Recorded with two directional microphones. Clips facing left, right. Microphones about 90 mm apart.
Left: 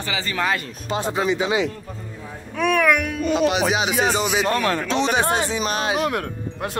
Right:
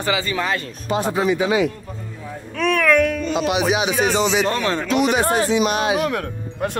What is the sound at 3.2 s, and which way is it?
Music, 35° right (ahead or behind).